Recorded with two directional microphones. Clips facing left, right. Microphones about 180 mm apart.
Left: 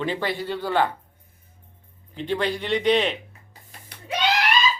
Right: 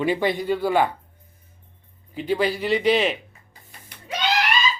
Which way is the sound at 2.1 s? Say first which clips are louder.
Right 3 dB; 5° right (ahead or behind).